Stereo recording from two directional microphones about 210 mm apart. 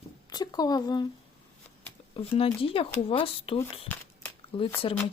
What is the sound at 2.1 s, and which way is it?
Speech, 25° left (ahead or behind).